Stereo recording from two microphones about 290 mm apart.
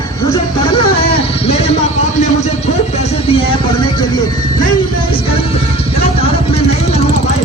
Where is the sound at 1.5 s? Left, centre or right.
Left.